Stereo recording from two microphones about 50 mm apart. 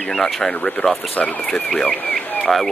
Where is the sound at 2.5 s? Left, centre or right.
Centre.